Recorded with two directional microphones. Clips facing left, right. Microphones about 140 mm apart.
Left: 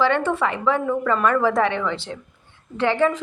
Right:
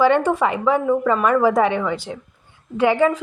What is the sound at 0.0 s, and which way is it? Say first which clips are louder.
Speech: right 4 dB; 15° right (ahead or behind).